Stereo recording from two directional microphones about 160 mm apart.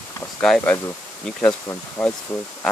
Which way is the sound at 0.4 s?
5° left (ahead or behind).